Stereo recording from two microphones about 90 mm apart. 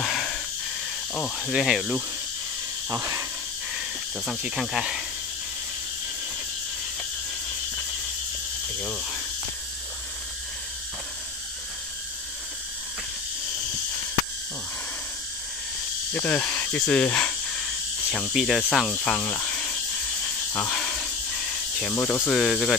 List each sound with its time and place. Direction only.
0.0 s a sound: 5° left (ahead or behind)
1.1 s speech: 10° left (ahead or behind)
1.5 s speech: centre (ahead or behind)
2.9 s speech: 35° right (ahead or behind)
4.3 s speech: 10° right (ahead or behind)
16.1 s speech: 15° left (ahead or behind)
18.3 s speech: 5° right (ahead or behind)
18.9 s speech: 15° left (ahead or behind)
19.2 s cricket: 15° left (ahead or behind)
20.5 s a sound: 15° left (ahead or behind)
21.9 s speech: 20° left (ahead or behind)
22.3 s speech: centre (ahead or behind)